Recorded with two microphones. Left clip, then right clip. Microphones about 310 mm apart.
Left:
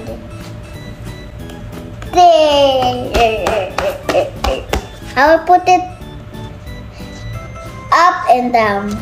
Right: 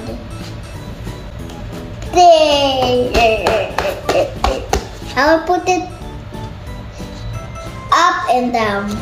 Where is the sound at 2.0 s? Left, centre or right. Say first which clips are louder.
Even; centre.